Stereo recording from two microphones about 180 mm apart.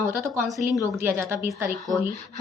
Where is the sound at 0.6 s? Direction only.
15° right (ahead or behind).